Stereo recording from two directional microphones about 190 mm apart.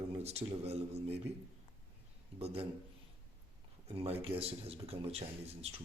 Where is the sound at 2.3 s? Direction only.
30° right (ahead or behind).